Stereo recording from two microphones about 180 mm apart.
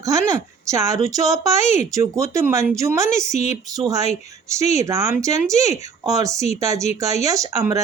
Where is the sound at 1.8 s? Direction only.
15° right (ahead or behind).